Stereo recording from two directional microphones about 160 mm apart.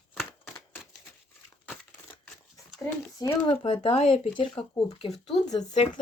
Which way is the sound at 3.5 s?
35° left (ahead or behind).